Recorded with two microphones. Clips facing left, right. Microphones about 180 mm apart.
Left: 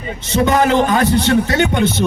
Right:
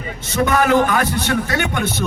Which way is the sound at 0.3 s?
25° left (ahead or behind).